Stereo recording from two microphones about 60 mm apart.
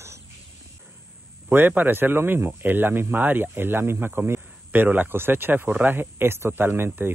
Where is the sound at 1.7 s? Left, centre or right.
Right.